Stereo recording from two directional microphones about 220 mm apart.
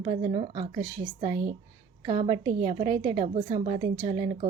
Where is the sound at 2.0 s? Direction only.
25° right (ahead or behind).